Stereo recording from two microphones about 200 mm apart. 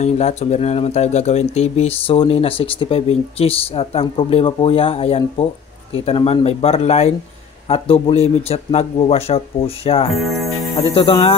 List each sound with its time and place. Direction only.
0.0 s speech: 35° left (ahead or behind)